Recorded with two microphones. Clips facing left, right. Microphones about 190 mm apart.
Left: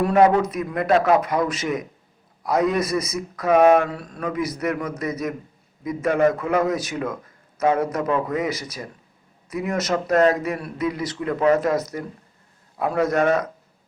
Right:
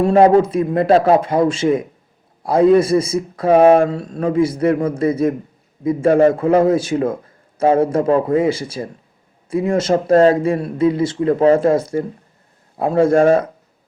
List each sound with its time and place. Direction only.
0.0 s speech: 30° right (ahead or behind)